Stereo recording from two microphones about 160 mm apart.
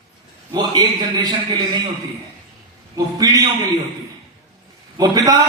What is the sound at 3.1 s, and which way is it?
Speech, 25° right (ahead or behind).